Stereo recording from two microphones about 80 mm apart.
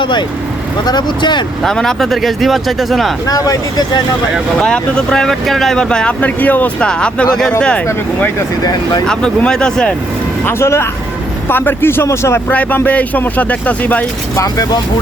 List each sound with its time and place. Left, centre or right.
0.0 s speech: left
0.9 s speech: left
1.6 s speech: centre
3.2 s speech: left
4.6 s speech: centre
9.0 s speech: centre
10.4 s speech: left
12.5 s speech: centre
14.3 s speech: left